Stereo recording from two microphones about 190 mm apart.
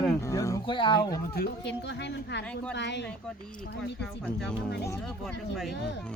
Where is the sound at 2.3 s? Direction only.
65° left (ahead or behind).